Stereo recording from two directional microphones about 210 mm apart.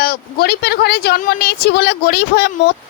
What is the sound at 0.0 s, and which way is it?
Speech, 45° left (ahead or behind).